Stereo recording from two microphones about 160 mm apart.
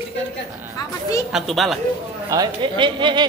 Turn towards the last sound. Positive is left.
turn(degrees=-30)  # may be behind; listen again after turning